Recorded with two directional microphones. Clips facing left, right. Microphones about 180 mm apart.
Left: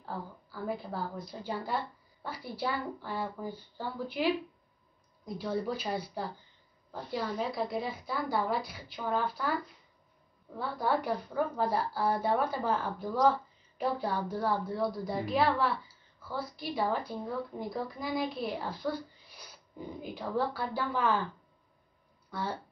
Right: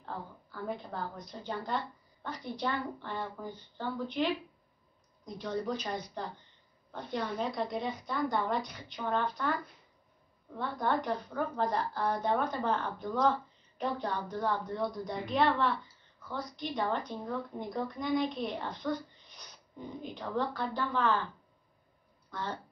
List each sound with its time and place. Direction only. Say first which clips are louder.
0.0 s a woman's voice: left 2 dB; 5° left (ahead or behind)
22.3 s speech: left 2 dB; 10° left (ahead or behind)